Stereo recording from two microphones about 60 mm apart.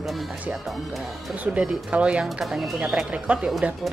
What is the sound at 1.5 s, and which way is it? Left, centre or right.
Speech, right.